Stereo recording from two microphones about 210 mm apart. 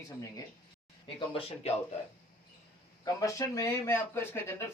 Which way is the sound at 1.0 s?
25° left (ahead or behind).